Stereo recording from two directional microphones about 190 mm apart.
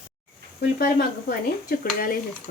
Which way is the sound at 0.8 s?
50° left (ahead or behind).